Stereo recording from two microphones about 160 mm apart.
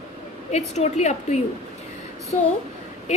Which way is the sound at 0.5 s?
40° left (ahead or behind).